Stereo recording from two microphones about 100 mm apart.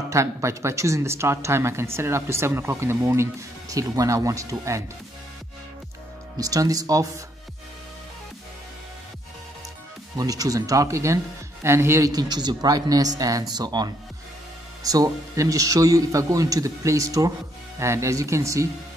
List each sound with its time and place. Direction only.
0.1 s speech: 30° right (ahead or behind)
6.3 s speech: 35° right (ahead or behind)
10.1 s speech: 35° right (ahead or behind)
12.1 s speech: 45° right (ahead or behind)